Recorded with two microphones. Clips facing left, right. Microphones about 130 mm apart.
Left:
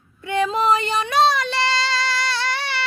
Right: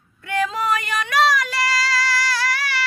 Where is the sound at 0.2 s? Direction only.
25° left (ahead or behind).